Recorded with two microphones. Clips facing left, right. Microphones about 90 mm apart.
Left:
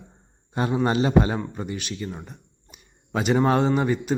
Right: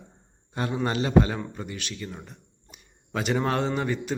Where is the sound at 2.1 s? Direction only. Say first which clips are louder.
Left 4 dB; 10° left (ahead or behind).